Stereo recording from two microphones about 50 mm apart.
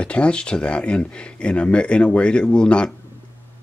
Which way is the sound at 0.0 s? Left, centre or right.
Left.